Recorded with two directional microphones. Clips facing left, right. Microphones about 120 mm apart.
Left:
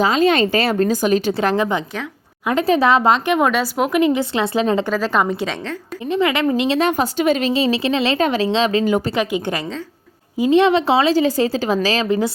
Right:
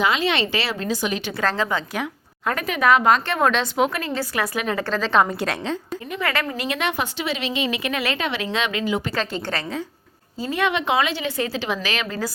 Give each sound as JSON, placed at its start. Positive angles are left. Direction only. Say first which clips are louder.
{"t": 0.0, "sound": "speech", "louder": "left 6 dB", "side_deg": 40}
{"t": 1.3, "sound": "speech", "louder": "left 5 dB", "side_deg": 20}
{"t": 2.6, "sound": "speech", "louder": "left 3 dB", "side_deg": 30}
{"t": 3.2, "sound": "a woman's voice", "louder": "left 4 dB", "side_deg": 15}
{"t": 3.9, "sound": "speech", "louder": "left 9 dB", "side_deg": 20}
{"t": 4.9, "sound": "a woman's voice", "louder": "left 1 dB", "side_deg": 10}
{"t": 6.1, "sound": "speech", "louder": "left 8 dB", "side_deg": 20}
{"t": 6.6, "sound": "speech", "louder": "left 8 dB", "side_deg": 30}
{"t": 8.2, "sound": "speech", "louder": "left 8 dB", "side_deg": 40}
{"t": 8.8, "sound": "speech", "louder": "left 6 dB", "side_deg": 45}
{"t": 9.1, "sound": "a woman's voice", "louder": "left 6 dB", "side_deg": 15}
{"t": 10.6, "sound": "speech", "louder": "left 3 dB", "side_deg": 35}
{"t": 12.0, "sound": "speech", "louder": "left 9 dB", "side_deg": 20}